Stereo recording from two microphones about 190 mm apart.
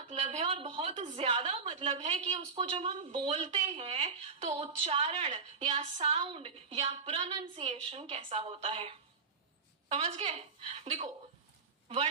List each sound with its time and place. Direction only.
0.1 s a woman's voice: 35° right (ahead or behind)